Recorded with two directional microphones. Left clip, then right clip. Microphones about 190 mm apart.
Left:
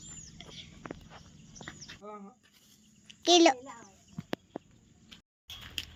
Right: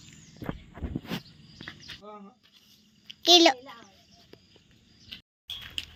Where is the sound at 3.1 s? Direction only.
5° left (ahead or behind).